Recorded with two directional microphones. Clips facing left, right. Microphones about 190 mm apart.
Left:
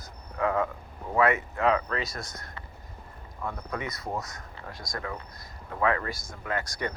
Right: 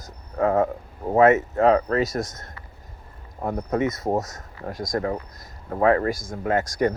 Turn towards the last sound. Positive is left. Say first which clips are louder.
# right 9 dB
turn(degrees=-45)  # may be behind; listen again after turning